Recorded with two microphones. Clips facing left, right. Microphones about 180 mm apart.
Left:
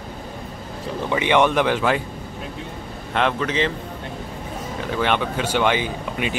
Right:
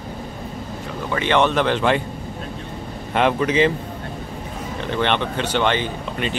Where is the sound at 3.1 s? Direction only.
10° right (ahead or behind).